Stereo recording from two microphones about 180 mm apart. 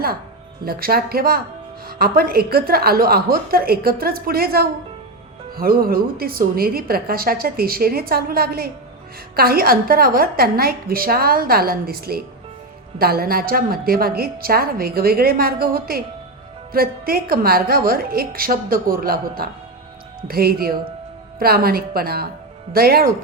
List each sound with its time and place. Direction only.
0.6 s a woman's voice: 55° right (ahead or behind)